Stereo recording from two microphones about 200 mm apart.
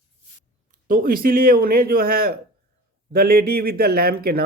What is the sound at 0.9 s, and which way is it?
Speech, 45° right (ahead or behind).